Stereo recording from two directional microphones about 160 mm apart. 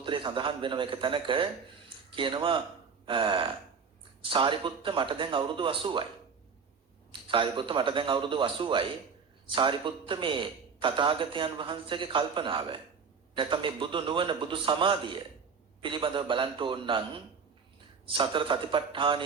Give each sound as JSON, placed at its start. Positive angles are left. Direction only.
{"t": 0.0, "sound": "a man's voice", "side_deg": -30}
{"t": 7.1, "sound": "a man's voice", "side_deg": -30}
{"t": 18.1, "sound": "a man's voice", "side_deg": -30}